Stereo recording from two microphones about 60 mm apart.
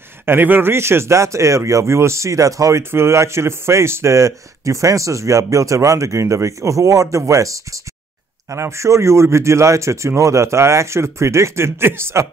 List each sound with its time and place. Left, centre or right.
0.2 s speech: right
2.9 s speech: right
8.5 s speech: right